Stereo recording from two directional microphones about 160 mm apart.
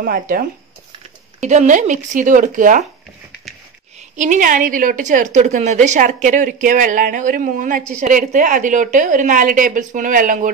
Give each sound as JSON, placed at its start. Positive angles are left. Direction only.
{"t": 0.0, "sound": "speech", "side_deg": -65}
{"t": 1.4, "sound": "a woman's voice", "side_deg": -50}
{"t": 4.2, "sound": "a woman's voice", "side_deg": -55}